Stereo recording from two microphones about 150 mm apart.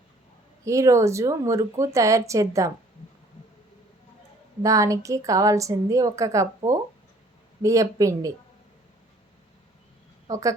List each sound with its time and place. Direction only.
0.6 s a woman's voice: 20° right (ahead or behind)
4.6 s a woman's voice: 20° right (ahead or behind)
10.2 s a woman's voice: 20° right (ahead or behind)